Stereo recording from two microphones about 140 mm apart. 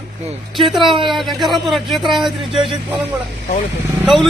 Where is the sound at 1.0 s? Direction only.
Centre (ahead or behind).